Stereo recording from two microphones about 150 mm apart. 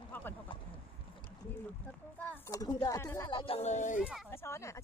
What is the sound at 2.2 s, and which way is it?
Speech, 10° left (ahead or behind).